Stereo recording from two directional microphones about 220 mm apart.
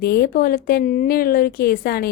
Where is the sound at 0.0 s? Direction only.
45° left (ahead or behind).